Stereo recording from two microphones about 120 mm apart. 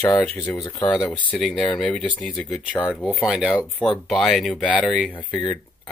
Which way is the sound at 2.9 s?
5° right (ahead or behind).